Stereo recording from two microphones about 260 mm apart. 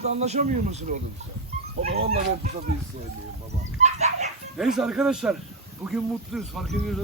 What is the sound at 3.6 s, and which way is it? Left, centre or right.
Fowl, right.